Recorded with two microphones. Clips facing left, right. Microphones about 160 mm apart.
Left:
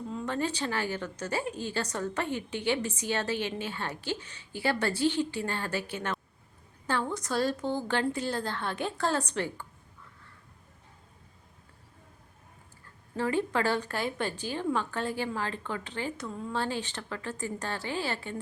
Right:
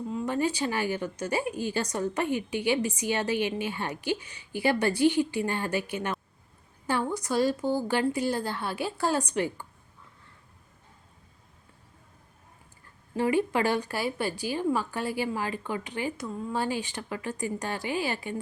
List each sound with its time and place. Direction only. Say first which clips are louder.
0.1 s a woman's voice: right 4 dB; 10° right (ahead or behind)
13.1 s a woman's voice: right 3 dB; 15° right (ahead or behind)